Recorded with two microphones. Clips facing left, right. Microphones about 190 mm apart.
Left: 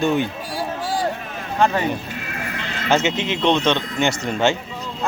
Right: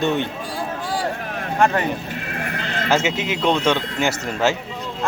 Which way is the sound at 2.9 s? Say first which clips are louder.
Left 1 dB; 5° right (ahead or behind).